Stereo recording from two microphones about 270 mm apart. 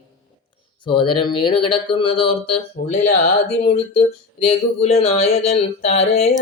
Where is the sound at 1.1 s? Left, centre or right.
Centre.